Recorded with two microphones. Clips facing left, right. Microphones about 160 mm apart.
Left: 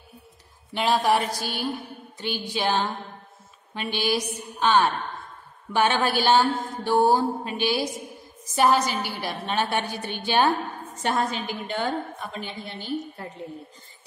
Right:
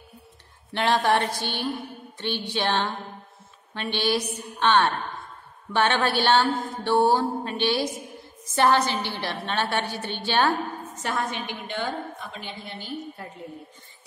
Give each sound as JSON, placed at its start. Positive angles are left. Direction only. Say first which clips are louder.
{"t": 0.7, "sound": "mantra", "louder": "even", "side_deg": 5}
{"t": 11.0, "sound": "a woman's voice", "louder": "left 4 dB", "side_deg": 30}